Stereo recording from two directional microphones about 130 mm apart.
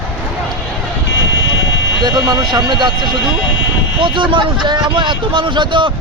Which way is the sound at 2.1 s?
30° right (ahead or behind).